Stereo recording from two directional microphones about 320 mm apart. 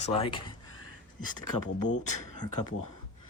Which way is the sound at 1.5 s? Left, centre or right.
Left.